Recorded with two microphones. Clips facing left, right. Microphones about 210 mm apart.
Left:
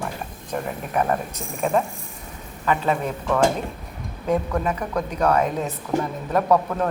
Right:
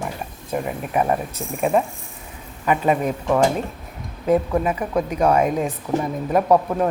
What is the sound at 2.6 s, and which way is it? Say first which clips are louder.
Speech: right 3 dB; 15° right (ahead or behind).